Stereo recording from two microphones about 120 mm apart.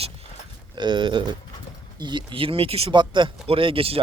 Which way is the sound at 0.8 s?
40° right (ahead or behind).